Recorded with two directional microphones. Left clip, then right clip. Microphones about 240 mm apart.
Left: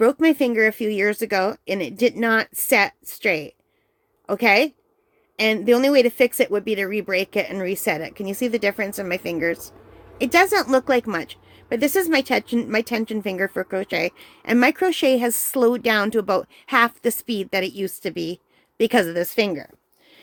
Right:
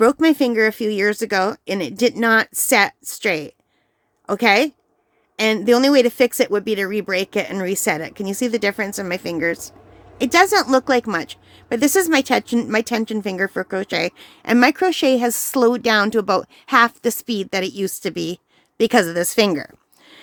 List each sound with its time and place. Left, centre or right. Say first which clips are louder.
0.0 s a woman's voice: right 2 dB; centre